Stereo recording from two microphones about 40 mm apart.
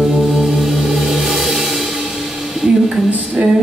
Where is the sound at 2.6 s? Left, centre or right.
Centre.